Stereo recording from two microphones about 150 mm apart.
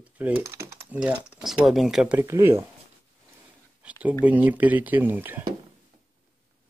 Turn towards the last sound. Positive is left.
turn(degrees=-15)  # may be behind; listen again after turning